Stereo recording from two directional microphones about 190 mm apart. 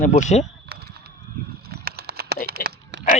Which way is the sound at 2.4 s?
65° right (ahead or behind).